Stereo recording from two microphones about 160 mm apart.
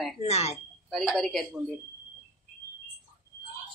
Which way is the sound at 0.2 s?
40° left (ahead or behind).